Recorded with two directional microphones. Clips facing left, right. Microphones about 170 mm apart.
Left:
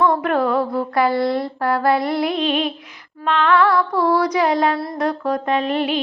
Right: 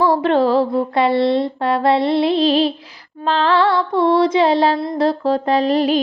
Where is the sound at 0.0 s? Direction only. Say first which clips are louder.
Right 3 dB; 30° right (ahead or behind).